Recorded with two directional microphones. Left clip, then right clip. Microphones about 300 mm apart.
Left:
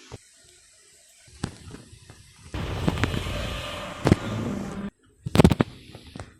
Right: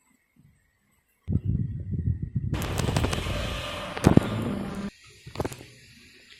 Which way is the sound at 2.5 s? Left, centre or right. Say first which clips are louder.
Left 1 dB; centre.